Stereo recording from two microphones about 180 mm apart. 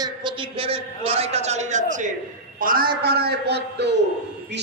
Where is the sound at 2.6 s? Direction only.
50° right (ahead or behind).